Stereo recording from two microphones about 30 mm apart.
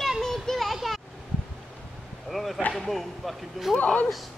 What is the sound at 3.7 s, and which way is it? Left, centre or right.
Speech, left.